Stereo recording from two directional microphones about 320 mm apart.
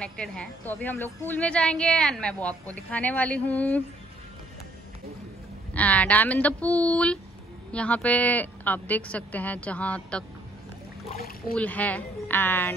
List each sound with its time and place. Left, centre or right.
0.0 s a woman's voice: centre
5.7 s a woman's voice: centre
11.1 s speech: left
11.5 s a woman's voice: centre